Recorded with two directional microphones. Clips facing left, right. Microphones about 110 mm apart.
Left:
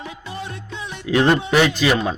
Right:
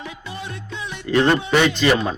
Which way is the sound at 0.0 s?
35° left (ahead or behind).